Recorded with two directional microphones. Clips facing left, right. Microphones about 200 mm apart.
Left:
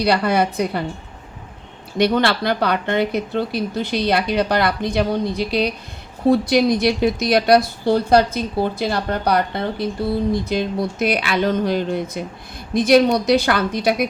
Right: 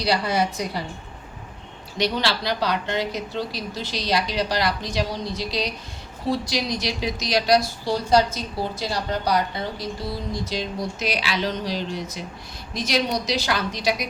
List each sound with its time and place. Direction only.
0.0 s speech: 60° left (ahead or behind)
2.0 s speech: 55° left (ahead or behind)